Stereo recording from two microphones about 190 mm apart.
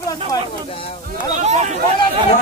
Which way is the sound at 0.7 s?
30° left (ahead or behind).